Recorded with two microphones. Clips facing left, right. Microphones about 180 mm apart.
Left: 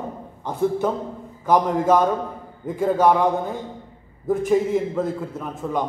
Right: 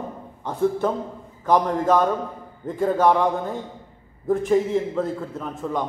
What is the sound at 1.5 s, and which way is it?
A man's voice, 10° left (ahead or behind).